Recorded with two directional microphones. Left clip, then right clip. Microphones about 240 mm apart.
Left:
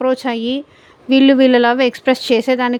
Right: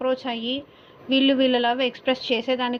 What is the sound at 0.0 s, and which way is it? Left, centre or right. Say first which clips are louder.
Speech: left 8 dB; left.